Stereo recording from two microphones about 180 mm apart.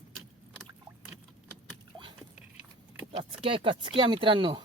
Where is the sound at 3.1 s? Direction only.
30° right (ahead or behind).